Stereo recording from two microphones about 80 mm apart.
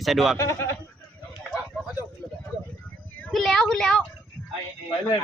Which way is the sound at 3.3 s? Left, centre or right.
Centre.